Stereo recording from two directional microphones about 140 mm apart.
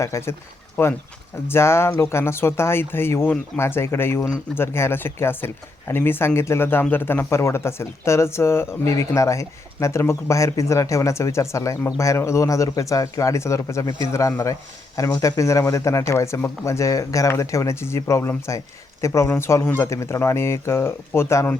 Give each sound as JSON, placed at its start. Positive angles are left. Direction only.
{"t": 0.0, "sound": "speech", "side_deg": 20}